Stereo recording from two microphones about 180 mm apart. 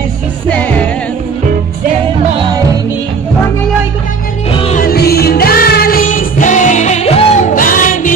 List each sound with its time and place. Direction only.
4.5 s music: 30° left (ahead or behind)
4.7 s music: 55° left (ahead or behind)